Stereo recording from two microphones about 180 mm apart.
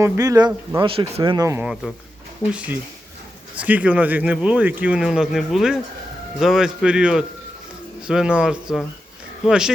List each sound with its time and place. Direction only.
0.0 s speech: 20° right (ahead or behind)
1.5 s speech: 10° right (ahead or behind)
3.6 s speech: 10° right (ahead or behind)